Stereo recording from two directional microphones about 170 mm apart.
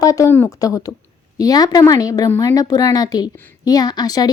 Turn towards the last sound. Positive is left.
turn(degrees=25)  # may be behind; listen again after turning